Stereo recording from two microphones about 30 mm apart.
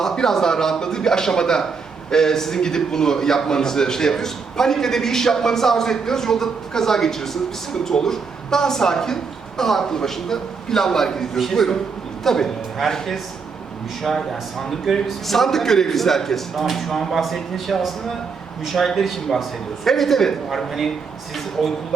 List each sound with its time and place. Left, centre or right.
0.0 s a man's voice: centre